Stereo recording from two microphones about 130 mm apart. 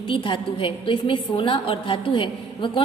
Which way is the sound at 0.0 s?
40° left (ahead or behind).